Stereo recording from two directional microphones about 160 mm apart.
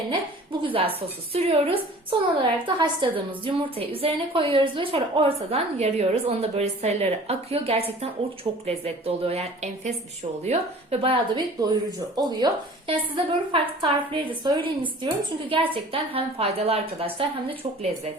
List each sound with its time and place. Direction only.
0.6 s a woman's voice: 35° right (ahead or behind)
11.0 s a woman's voice: 30° right (ahead or behind)